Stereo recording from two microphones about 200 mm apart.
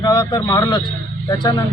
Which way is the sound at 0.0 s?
20° left (ahead or behind).